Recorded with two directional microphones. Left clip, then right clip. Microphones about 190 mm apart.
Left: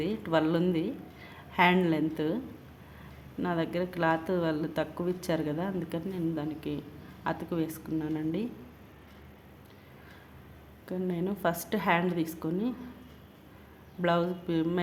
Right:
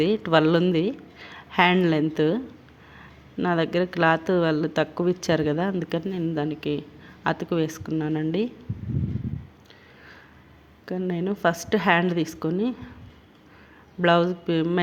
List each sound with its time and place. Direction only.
0.0 s speech: 35° right (ahead or behind)
3.4 s speech: 30° right (ahead or behind)
10.8 s speech: 30° right (ahead or behind)
14.0 s speech: 30° right (ahead or behind)